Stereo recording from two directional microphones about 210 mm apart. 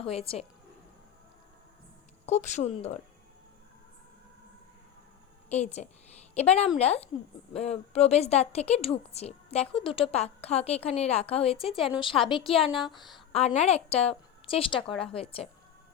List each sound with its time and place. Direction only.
0.0 s a woman's voice: 25° left (ahead or behind)
2.2 s a woman's voice: 35° left (ahead or behind)
5.5 s a woman's voice: 30° left (ahead or behind)
12.7 s a woman's voice: centre (ahead or behind)
13.3 s a woman's voice: 30° left (ahead or behind)